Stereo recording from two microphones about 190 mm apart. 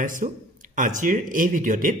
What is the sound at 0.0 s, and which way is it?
A man's voice, 45° right (ahead or behind).